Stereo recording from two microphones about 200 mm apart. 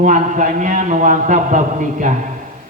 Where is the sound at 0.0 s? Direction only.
40° right (ahead or behind).